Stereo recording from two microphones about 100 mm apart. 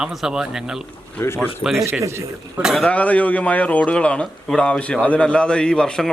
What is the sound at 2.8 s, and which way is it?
A man's voice, 15° left (ahead or behind).